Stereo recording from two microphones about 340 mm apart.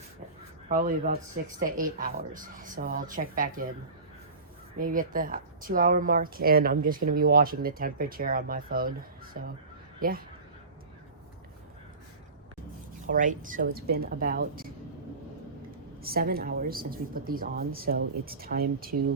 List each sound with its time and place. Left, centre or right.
0.7 s speech: right
4.8 s speech: right
13.1 s speech: right
16.0 s speech: right